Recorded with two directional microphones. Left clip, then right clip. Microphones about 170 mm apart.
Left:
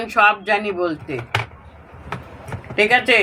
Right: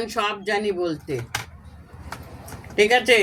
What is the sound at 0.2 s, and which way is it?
Speech, 15° right (ahead or behind).